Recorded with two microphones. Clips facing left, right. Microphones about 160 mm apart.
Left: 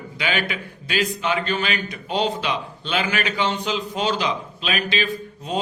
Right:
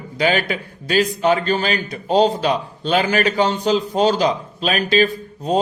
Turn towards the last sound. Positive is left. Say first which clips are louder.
# right 6 dB
turn(degrees=-40)  # may be behind; listen again after turning